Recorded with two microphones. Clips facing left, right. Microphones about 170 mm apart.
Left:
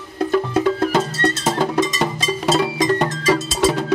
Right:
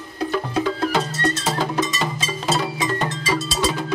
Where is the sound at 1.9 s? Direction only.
65° left (ahead or behind).